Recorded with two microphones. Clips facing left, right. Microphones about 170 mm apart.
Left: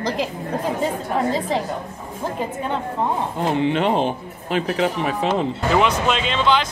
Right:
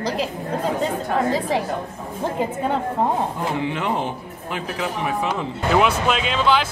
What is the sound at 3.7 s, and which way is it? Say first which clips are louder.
Speech: left 5 dB; 25° left (ahead or behind).